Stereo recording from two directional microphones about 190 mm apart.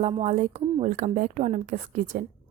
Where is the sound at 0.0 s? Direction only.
35° right (ahead or behind).